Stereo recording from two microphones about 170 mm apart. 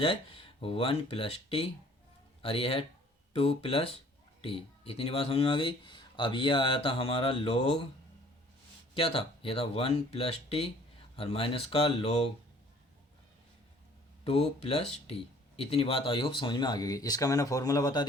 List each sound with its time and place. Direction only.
0.0 s speech: 30° left (ahead or behind)
9.0 s speech: 35° left (ahead or behind)
14.3 s speech: 35° left (ahead or behind); by 18.0 s 20° left (ahead or behind)